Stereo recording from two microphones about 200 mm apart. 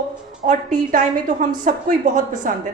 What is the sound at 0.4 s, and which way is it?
Speech, 40° right (ahead or behind).